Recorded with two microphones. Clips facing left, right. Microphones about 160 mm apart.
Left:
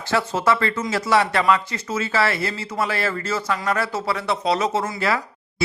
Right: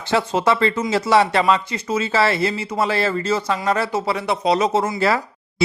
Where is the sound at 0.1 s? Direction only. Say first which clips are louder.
Right 2 dB; 20° right (ahead or behind).